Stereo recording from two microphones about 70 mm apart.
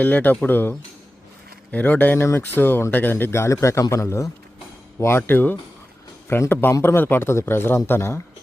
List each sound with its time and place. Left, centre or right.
0.0 s a man's voice: left
4.9 s speech: left